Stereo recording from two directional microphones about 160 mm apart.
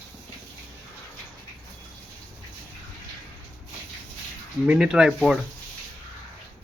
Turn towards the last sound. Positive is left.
turn(degrees=-5)  # may be behind; listen again after turning